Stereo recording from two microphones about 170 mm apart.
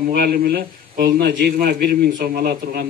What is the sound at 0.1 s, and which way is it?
A man's voice, 60° right (ahead or behind).